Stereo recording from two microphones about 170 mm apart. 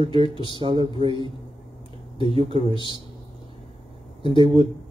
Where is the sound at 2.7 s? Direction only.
30° left (ahead or behind).